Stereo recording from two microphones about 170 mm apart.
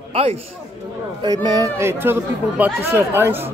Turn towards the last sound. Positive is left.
turn(degrees=-15)  # may be behind; listen again after turning